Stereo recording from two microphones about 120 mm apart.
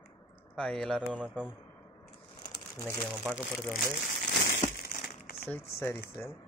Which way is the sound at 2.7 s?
25° left (ahead or behind).